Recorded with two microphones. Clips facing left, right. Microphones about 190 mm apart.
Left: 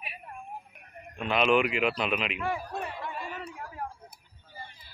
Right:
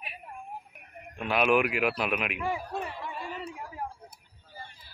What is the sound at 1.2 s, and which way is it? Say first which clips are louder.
Speech: even; 5° right (ahead or behind).